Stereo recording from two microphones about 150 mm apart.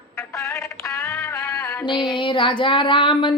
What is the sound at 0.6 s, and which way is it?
Music, 20° left (ahead or behind).